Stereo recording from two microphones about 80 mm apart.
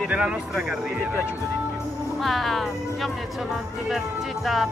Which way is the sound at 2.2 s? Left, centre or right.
Centre.